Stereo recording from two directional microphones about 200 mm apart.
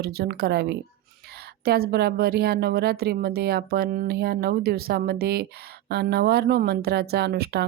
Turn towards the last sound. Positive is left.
turn(degrees=-55)  # may be behind; listen again after turning